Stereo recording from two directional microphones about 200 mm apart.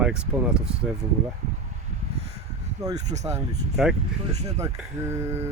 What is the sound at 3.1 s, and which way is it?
Speech, 35° right (ahead or behind).